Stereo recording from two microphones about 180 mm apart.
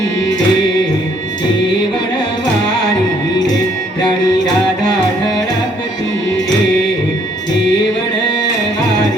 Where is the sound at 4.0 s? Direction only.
20° left (ahead or behind).